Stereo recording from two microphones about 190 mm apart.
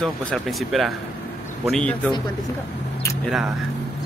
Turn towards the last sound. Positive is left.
turn(degrees=0)  # may be behind; listen again after turning